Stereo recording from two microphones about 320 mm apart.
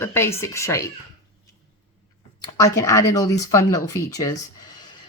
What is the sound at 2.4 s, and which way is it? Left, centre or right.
Speech, centre.